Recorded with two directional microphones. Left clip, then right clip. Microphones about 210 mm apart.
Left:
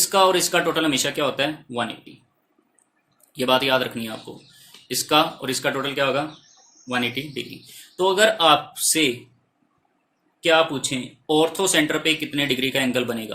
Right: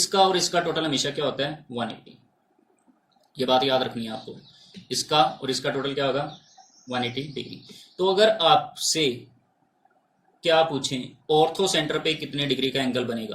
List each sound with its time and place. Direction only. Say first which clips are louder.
0.0 s a man's voice: left 3 dB; 25° left (ahead or behind)
3.3 s a man's voice: left 2 dB; 25° left (ahead or behind)
4.9 s a man's voice: left 2 dB; 25° left (ahead or behind)
10.4 s a man's voice: left 2 dB; 25° left (ahead or behind)